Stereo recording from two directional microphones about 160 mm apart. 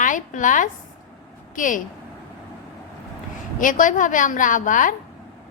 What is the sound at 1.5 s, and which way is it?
Speech, 55° left (ahead or behind).